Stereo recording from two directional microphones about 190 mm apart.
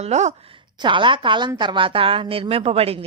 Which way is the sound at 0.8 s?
25° right (ahead or behind).